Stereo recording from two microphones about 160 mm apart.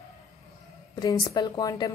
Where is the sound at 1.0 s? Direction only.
25° left (ahead or behind).